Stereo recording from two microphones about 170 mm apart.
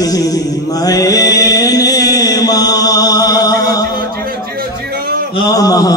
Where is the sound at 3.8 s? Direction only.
60° right (ahead or behind).